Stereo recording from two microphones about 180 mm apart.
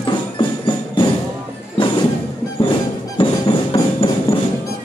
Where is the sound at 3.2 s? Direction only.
30° left (ahead or behind).